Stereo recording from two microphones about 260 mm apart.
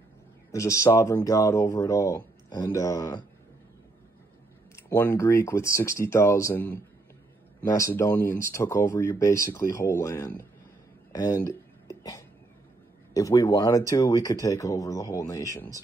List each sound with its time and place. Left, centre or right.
0.5 s speech: centre
4.7 s speech: centre